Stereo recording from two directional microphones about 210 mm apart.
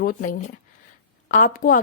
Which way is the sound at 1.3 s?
40° left (ahead or behind).